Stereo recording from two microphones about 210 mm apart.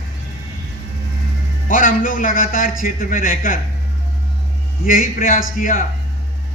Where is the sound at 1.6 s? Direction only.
40° left (ahead or behind).